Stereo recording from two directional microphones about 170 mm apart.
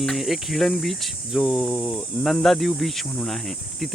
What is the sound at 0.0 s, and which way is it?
Speech, centre (ahead or behind).